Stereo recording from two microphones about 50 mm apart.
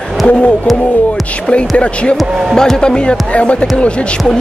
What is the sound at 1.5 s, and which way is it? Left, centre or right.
Speech, left.